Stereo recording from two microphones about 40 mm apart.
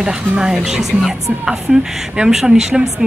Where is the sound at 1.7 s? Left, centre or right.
Right.